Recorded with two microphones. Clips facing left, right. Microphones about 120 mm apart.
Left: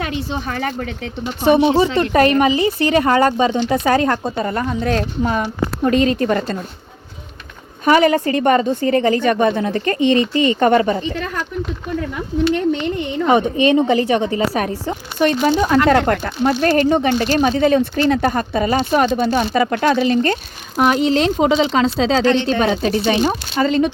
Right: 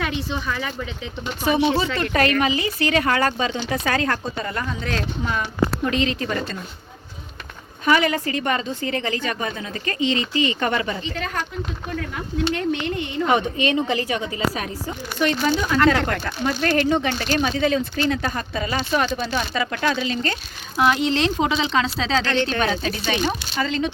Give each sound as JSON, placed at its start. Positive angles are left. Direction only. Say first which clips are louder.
{"t": 0.0, "sound": "speech", "louder": "left 3 dB", "side_deg": 45}
{"t": 1.9, "sound": "a woman's voice", "louder": "left 7 dB", "side_deg": 30}
{"t": 7.9, "sound": "speech", "louder": "left 6 dB", "side_deg": 40}
{"t": 8.4, "sound": "speech", "louder": "left 9 dB", "side_deg": 45}
{"t": 13.2, "sound": "speech", "louder": "left 6 dB", "side_deg": 30}
{"t": 14.2, "sound": "speech", "louder": "left 7 dB", "side_deg": 40}
{"t": 16.6, "sound": "a woman's voice", "louder": "left 4 dB", "side_deg": 30}
{"t": 17.7, "sound": "speech", "louder": "left 7 dB", "side_deg": 50}
{"t": 19.1, "sound": "speech", "louder": "left 8 dB", "side_deg": 55}
{"t": 19.4, "sound": "a woman's voice", "louder": "left 7 dB", "side_deg": 35}
{"t": 23.6, "sound": "speech", "louder": "left 9 dB", "side_deg": 50}